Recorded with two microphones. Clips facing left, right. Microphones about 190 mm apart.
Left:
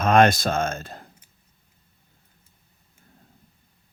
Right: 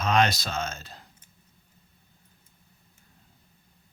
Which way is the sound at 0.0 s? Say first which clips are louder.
Left 7 dB; 50° left (ahead or behind).